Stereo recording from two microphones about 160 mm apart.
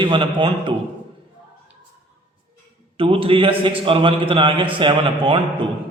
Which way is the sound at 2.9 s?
35° right (ahead or behind).